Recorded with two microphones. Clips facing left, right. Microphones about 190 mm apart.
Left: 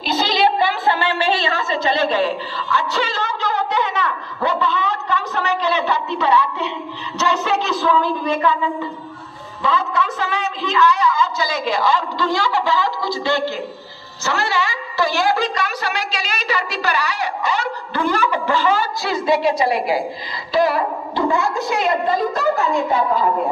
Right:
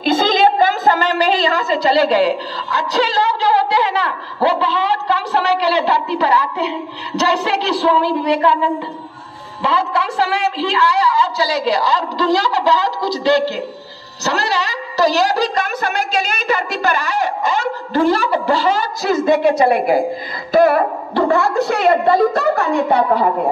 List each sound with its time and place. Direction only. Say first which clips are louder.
0.0 s a sound: right 4 dB; 50° right (ahead or behind)
2.7 s a woman's voice: right 4 dB; 35° right (ahead or behind)
9.6 s a woman's voice: right 2 dB; 30° right (ahead or behind); by 23.2 s 65° right (ahead or behind)